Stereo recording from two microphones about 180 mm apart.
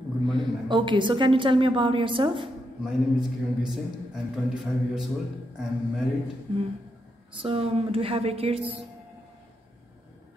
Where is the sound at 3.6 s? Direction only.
5° right (ahead or behind).